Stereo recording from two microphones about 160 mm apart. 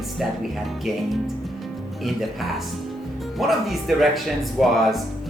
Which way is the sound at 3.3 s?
Centre (ahead or behind).